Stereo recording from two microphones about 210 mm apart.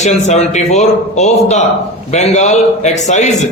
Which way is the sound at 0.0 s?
35° left (ahead or behind).